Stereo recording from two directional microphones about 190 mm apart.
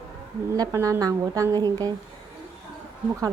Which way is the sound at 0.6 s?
15° right (ahead or behind).